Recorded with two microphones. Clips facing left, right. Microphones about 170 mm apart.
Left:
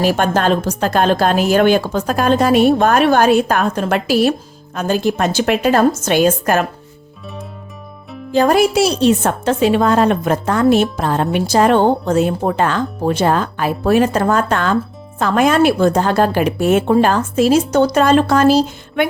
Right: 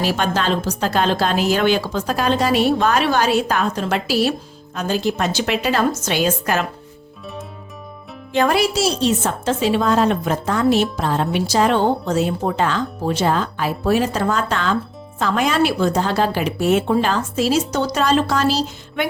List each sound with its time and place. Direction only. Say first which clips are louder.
0.0 s a woman's voice: left 5 dB; 50° left (ahead or behind)
8.3 s a woman's voice: left 5 dB; 40° left (ahead or behind)